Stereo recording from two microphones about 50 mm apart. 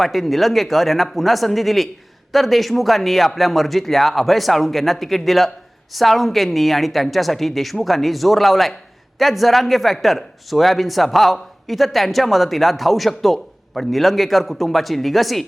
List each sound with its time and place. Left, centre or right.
0.0 s speech: centre